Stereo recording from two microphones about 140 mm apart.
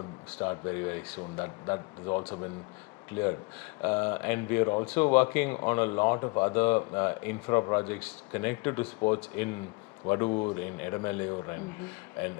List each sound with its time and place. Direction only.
0.3 s speech: 10° left (ahead or behind)